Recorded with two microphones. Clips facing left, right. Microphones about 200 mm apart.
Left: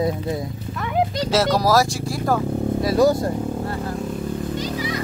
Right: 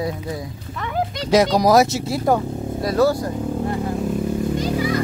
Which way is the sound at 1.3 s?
15° right (ahead or behind).